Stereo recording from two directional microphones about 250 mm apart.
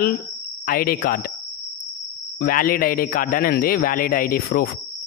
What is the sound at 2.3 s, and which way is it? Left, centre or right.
A man's voice, left.